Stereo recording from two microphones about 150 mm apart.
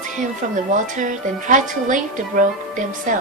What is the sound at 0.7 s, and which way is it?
A woman's voice, 60° right (ahead or behind).